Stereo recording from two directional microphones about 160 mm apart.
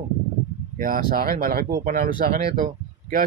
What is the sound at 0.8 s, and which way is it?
Speech, 65° right (ahead or behind).